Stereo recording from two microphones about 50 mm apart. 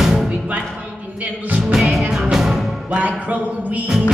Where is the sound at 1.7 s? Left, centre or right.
Centre.